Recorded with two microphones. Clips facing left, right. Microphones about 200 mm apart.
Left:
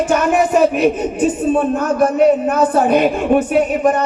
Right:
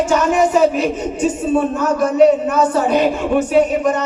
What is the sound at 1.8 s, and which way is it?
Speech, 55° left (ahead or behind).